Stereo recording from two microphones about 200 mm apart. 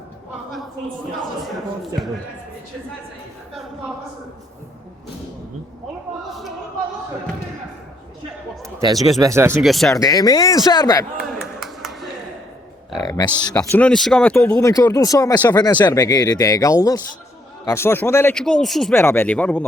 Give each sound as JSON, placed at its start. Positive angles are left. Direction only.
{"t": 9.0, "sound": "speech", "side_deg": 0}
{"t": 9.2, "sound": "speech", "side_deg": -15}
{"t": 9.6, "sound": "speech", "side_deg": 0}
{"t": 10.0, "sound": "speech", "side_deg": 20}
{"t": 11.2, "sound": "a sound", "side_deg": 0}
{"t": 13.0, "sound": "speech", "side_deg": 20}
{"t": 13.7, "sound": "speech", "side_deg": 5}